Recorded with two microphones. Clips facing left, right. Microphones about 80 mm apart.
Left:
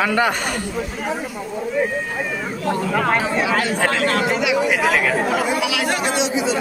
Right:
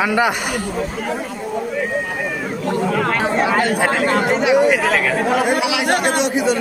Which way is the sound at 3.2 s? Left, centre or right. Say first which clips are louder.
Right 3 dB; right.